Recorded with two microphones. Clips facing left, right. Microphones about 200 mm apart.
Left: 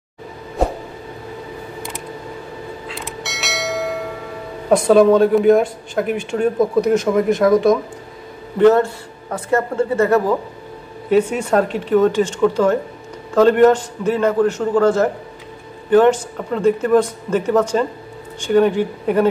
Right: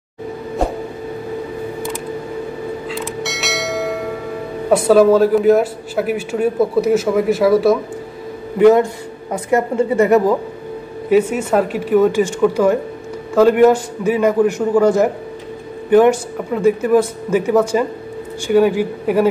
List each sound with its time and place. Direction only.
2.9 s church bell: centre (ahead or behind)
4.6 s a man's voice: 5° right (ahead or behind)